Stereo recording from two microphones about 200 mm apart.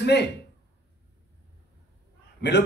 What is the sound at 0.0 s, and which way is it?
Speech, 55° left (ahead or behind).